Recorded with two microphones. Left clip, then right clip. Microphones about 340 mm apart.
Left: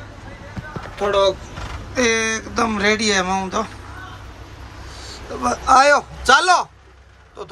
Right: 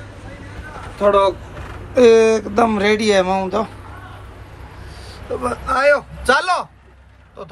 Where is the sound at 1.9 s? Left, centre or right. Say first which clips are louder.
Right 8 dB; centre.